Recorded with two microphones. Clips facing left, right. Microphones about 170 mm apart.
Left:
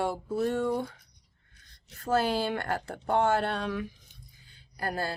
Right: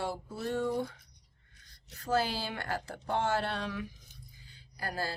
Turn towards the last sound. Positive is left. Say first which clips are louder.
# left 4 dB
turn(degrees=55)  # may be behind; listen again after turning